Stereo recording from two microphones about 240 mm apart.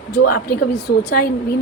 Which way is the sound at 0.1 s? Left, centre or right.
Left.